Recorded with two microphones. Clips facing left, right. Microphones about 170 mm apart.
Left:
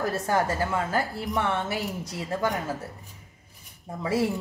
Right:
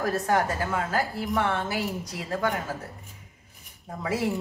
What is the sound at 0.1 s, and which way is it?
A woman's voice, 30° left (ahead or behind).